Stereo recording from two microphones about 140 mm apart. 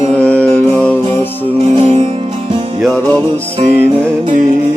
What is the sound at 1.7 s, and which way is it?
Music, 45° right (ahead or behind).